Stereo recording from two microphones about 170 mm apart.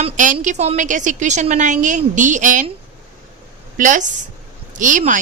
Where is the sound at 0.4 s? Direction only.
40° right (ahead or behind).